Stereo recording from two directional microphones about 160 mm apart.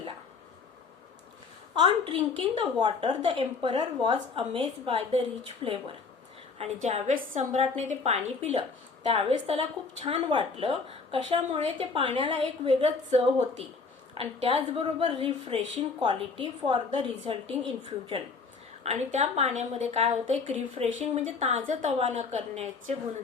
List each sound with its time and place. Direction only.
1.7 s a woman's voice: 30° right (ahead or behind)
7.1 s a woman's voice: 60° right (ahead or behind)
7.5 s a woman's voice: 45° right (ahead or behind)